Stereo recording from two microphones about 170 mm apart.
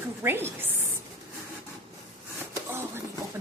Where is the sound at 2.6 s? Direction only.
15° right (ahead or behind).